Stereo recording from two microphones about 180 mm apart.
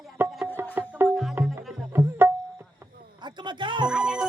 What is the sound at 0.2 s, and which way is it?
Music, 10° right (ahead or behind).